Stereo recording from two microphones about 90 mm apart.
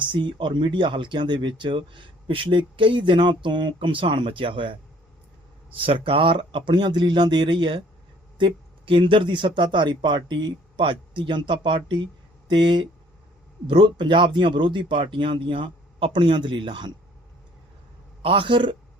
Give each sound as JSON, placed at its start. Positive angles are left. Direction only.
{"t": 0.1, "sound": "speech", "side_deg": -60}
{"t": 5.7, "sound": "speech", "side_deg": -85}
{"t": 8.4, "sound": "speech", "side_deg": -70}
{"t": 18.2, "sound": "a man's voice", "side_deg": -80}